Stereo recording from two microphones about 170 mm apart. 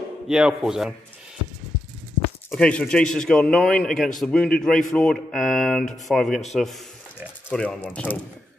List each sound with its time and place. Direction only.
0.3 s a man's voice: 5° right (ahead or behind)
2.5 s a man's voice: 5° left (ahead or behind)
6.5 s a sound: centre (ahead or behind)
7.4 s speech: 5° left (ahead or behind)